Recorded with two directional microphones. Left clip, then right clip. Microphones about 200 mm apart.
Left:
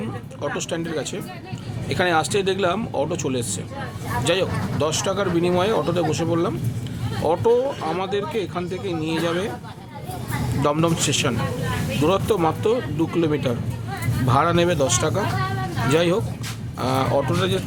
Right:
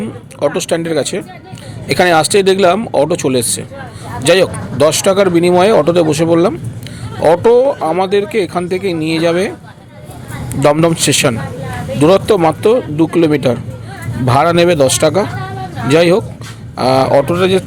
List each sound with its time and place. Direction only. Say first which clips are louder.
0.3 s speech: right 12 dB; 30° right (ahead or behind)
10.6 s speech: right 11 dB; 30° right (ahead or behind)